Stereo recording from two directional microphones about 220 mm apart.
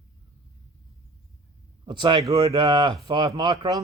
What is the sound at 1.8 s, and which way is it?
Speech, 20° right (ahead or behind).